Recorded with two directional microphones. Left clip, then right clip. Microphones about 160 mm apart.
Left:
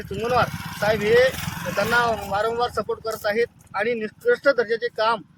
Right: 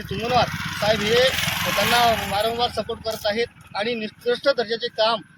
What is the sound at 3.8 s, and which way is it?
Speech, 50° left (ahead or behind).